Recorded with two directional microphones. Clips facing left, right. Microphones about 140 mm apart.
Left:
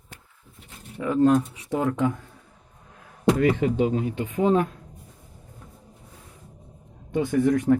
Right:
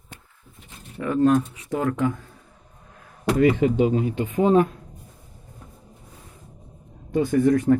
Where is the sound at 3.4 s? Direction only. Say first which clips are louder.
Right 7 dB; 15° right (ahead or behind).